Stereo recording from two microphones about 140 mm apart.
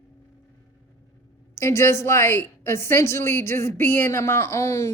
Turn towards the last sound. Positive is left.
turn(degrees=20)  # may be behind; listen again after turning